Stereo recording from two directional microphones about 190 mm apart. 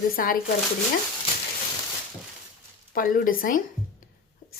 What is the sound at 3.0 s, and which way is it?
Speech, 50° left (ahead or behind).